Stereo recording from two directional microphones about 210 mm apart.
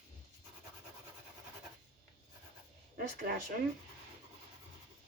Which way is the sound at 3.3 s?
40° right (ahead or behind).